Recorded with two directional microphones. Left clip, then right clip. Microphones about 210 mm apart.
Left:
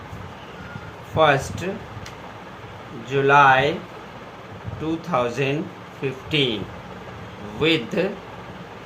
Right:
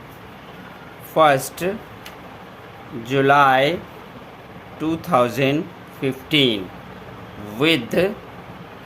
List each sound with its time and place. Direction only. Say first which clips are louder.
1.1 s speech: right 3 dB; 50° right (ahead or behind)
3.1 s speech: even; 50° right (ahead or behind)
4.8 s speech: right 5 dB; 50° right (ahead or behind)
7.6 s speech: right 2 dB; 50° right (ahead or behind)